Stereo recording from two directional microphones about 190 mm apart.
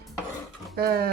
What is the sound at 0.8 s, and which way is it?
Speech, 55° right (ahead or behind).